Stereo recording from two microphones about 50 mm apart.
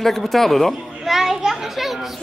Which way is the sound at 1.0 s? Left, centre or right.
Centre.